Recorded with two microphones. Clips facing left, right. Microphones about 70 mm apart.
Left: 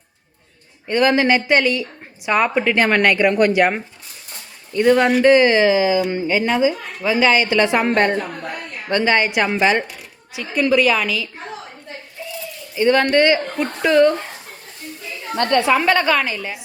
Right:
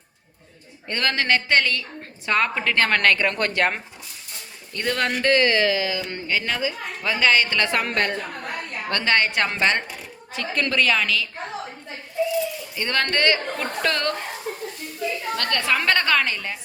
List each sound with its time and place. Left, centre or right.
0.9 s a woman's voice: centre
5.2 s a woman's voice: centre
12.7 s a woman's voice: centre
15.4 s a woman's voice: left